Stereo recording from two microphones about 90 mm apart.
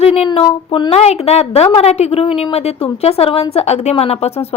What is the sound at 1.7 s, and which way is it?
A woman's voice, 90° left.